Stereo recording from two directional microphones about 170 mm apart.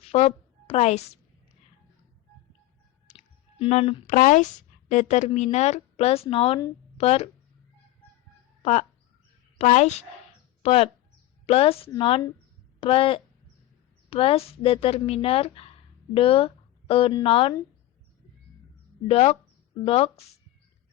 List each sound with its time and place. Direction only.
0.0 s a woman's voice: 35° left (ahead or behind)
3.1 s a sound: 45° left (ahead or behind)
3.6 s speech: 35° left (ahead or behind)
8.6 s speech: 40° left (ahead or behind)
19.0 s speech: 35° left (ahead or behind)